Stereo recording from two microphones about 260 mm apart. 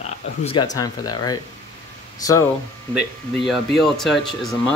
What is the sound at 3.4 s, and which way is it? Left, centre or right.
Speech, centre.